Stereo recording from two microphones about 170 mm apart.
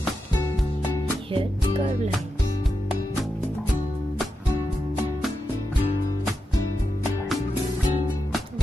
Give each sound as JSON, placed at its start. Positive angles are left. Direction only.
{"t": 1.3, "sound": "music", "side_deg": -35}